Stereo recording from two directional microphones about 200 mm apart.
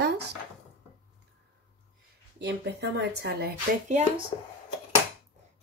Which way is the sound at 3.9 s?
35° right (ahead or behind).